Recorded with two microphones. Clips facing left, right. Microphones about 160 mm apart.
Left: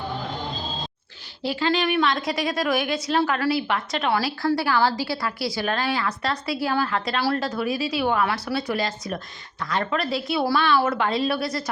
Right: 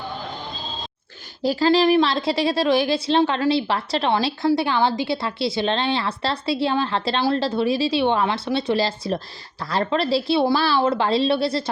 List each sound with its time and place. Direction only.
1.4 s a woman's voice: 40° right (ahead or behind)